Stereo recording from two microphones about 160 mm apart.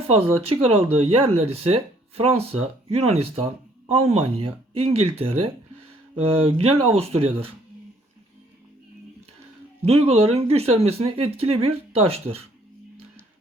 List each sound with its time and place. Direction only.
0.1 s speech: 35° right (ahead or behind)
9.8 s speech: 40° right (ahead or behind)